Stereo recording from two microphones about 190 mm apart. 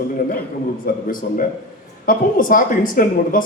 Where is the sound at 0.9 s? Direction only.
50° left (ahead or behind).